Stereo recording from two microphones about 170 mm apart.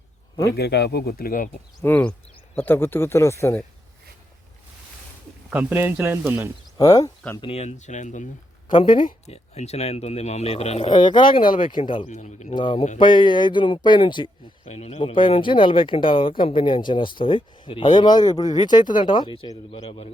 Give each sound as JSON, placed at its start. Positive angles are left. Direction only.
{"t": 0.5, "sound": "speech", "side_deg": 75}
{"t": 1.8, "sound": "speech", "side_deg": 10}
{"t": 5.5, "sound": "speech", "side_deg": -10}
{"t": 6.7, "sound": "speech", "side_deg": 20}
{"t": 7.4, "sound": "speech", "side_deg": 40}
{"t": 8.6, "sound": "speech", "side_deg": 30}
{"t": 8.9, "sound": "speech", "side_deg": 55}
{"t": 9.3, "sound": "speech", "side_deg": 40}
{"t": 11.4, "sound": "speech", "side_deg": 55}
{"t": 11.7, "sound": "speech", "side_deg": 30}
{"t": 12.0, "sound": "speech", "side_deg": 45}
{"t": 12.5, "sound": "speech", "side_deg": 30}